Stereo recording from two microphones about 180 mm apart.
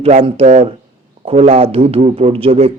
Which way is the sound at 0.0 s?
30° right (ahead or behind).